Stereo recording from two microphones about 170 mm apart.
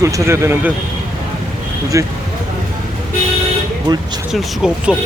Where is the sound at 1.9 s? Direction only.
20° right (ahead or behind).